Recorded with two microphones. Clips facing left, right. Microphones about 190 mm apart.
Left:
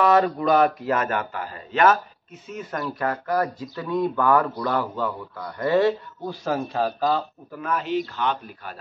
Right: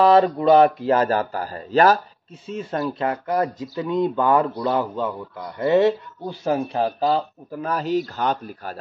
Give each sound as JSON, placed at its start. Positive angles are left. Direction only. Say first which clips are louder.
{"t": 0.0, "sound": "speech", "louder": "right 4 dB", "side_deg": -30}